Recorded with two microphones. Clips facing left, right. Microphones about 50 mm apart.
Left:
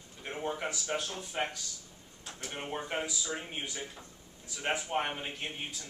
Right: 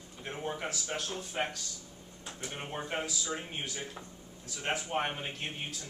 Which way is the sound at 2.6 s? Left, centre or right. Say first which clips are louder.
Left 1 dB; centre.